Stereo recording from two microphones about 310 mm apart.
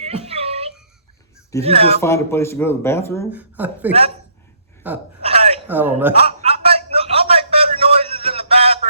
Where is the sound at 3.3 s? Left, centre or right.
Centre.